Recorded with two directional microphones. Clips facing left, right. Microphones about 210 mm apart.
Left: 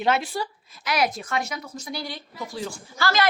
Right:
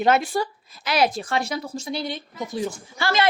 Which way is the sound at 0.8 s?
30° right (ahead or behind).